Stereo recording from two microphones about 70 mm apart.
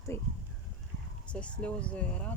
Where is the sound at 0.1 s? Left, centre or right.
Left.